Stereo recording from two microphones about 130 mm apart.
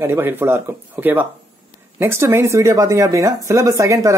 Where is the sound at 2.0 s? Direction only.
20° right (ahead or behind).